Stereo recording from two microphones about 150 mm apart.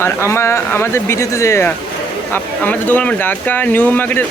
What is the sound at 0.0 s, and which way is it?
Speech, 15° left (ahead or behind).